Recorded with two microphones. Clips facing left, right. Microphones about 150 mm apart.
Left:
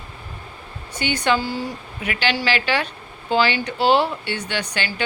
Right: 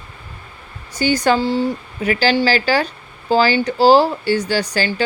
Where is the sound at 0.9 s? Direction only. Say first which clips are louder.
Right 5 dB; 40° right (ahead or behind).